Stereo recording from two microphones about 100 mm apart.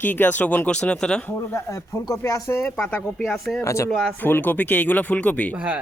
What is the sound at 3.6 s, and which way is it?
Speech, 30° left (ahead or behind).